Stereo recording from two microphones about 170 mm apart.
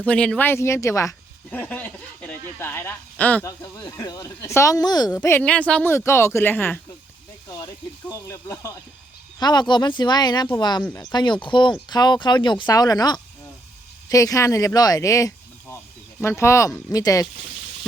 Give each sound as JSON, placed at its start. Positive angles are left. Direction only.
{"t": 0.0, "sound": "speech", "side_deg": 5}
{"t": 8.1, "sound": "speech", "side_deg": 15}